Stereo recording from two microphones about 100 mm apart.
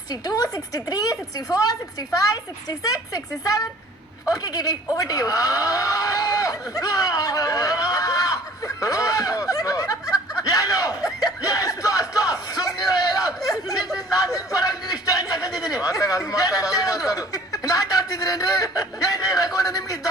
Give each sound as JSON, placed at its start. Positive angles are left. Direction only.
{"t": 0.1, "sound": "a woman's voice", "side_deg": 40}
{"t": 4.9, "sound": "a sound", "side_deg": 35}
{"t": 13.9, "sound": "a man's voice", "side_deg": 40}